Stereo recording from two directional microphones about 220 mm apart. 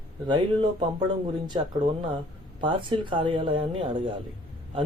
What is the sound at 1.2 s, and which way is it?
Speech, 20° right (ahead or behind).